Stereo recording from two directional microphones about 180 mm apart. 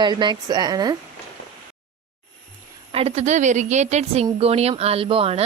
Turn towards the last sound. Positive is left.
turn(degrees=-30)  # may be behind; listen again after turning